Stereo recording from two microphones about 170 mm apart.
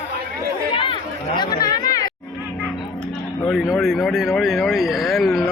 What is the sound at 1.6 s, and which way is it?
Chatter, 25° left (ahead or behind).